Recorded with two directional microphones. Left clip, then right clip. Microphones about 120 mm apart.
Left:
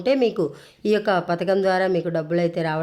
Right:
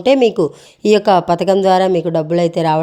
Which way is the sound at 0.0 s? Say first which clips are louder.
Right 8 dB; 55° right (ahead or behind).